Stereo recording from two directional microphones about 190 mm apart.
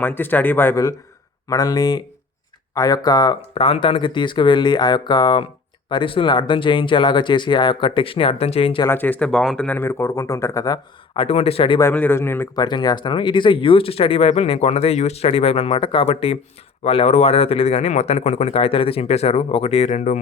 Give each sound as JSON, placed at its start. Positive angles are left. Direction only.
{"t": 0.0, "sound": "speech", "side_deg": 10}
{"t": 8.9, "sound": "speech", "side_deg": 10}
{"t": 11.8, "sound": "speech", "side_deg": 10}